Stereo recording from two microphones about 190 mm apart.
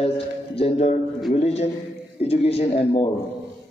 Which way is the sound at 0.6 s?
30° left (ahead or behind).